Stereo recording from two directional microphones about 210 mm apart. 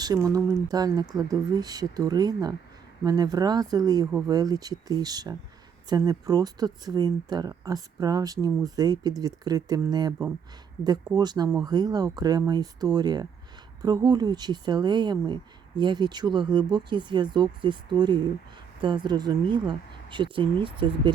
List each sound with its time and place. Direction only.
0.0 s speech: 15° right (ahead or behind)
11.2 s speech: 20° right (ahead or behind)